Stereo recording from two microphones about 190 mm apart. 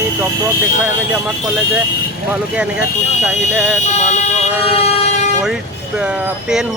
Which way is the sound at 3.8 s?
35° left (ahead or behind).